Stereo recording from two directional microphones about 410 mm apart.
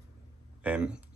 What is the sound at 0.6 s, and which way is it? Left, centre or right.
Speech, centre.